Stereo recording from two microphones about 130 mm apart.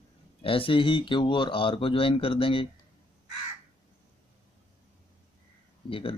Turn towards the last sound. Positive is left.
turn(degrees=45)  # may be behind; listen again after turning